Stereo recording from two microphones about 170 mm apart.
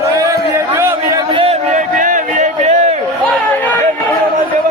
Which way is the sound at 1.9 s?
50° right (ahead or behind).